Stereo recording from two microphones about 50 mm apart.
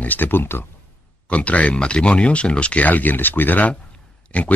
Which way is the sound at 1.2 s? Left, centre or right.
Left.